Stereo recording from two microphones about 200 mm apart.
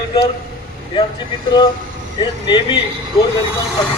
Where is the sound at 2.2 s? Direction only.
20° left (ahead or behind).